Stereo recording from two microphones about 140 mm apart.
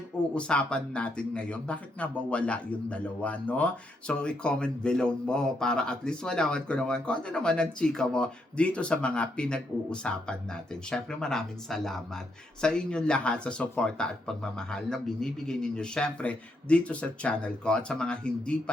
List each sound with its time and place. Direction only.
0.3 s speech: 5° left (ahead or behind)